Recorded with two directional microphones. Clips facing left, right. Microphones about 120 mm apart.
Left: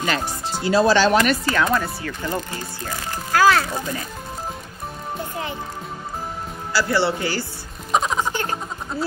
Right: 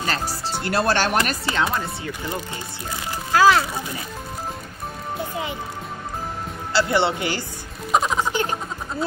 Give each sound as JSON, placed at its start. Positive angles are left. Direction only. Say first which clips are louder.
{"t": 0.0, "sound": "music", "louder": "left 2 dB", "side_deg": -40}
{"t": 0.6, "sound": "speech", "louder": "left 5 dB", "side_deg": -60}
{"t": 1.5, "sound": "a child's voice", "louder": "left 3 dB", "side_deg": -20}
{"t": 3.3, "sound": "a child's voice", "louder": "right 1 dB", "side_deg": -20}
{"t": 6.7, "sound": "a child's voice", "louder": "even", "side_deg": -20}
{"t": 7.9, "sound": "music", "louder": "even", "side_deg": 0}
{"t": 8.3, "sound": "a sound", "louder": "right 1 dB", "side_deg": -15}